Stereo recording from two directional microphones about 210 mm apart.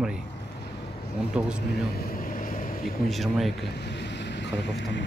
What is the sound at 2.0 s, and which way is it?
Vehicle, 45° left (ahead or behind).